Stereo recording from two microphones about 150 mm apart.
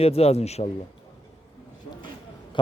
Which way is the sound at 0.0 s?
45° left (ahead or behind).